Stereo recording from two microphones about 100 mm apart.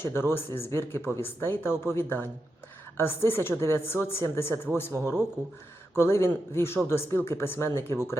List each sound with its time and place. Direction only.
0.0 s a woman's voice: 25° left (ahead or behind)